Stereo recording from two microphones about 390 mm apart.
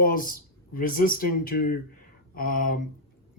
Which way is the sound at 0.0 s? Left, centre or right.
Left.